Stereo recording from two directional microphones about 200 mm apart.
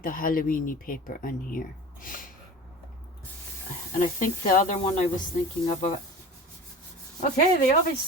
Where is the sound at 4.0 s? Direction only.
40° left (ahead or behind).